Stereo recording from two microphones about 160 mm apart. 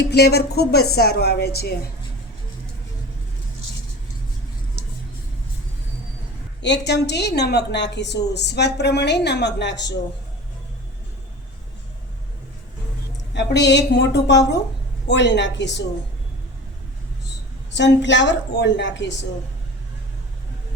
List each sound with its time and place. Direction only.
0.0 s speech: 90° left
6.6 s a woman's voice: 90° left
13.3 s a woman's voice: 90° left
17.7 s a woman's voice: 90° left